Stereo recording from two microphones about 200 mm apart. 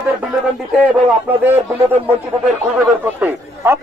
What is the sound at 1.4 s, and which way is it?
A man's voice, 10° right (ahead or behind).